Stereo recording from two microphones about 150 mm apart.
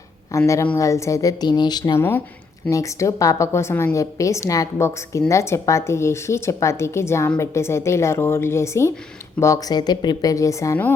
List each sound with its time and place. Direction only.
0.3 s a woman's voice: 20° left (ahead or behind)